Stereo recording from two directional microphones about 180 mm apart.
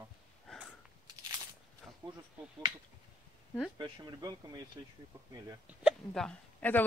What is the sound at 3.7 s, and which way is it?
Speech, 25° right (ahead or behind).